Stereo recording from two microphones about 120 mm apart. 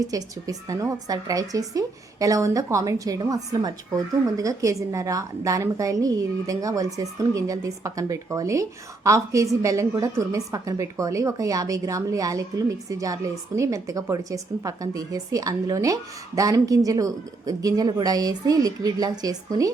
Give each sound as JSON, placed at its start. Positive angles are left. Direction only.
{"t": 0.0, "sound": "a woman's voice", "side_deg": -30}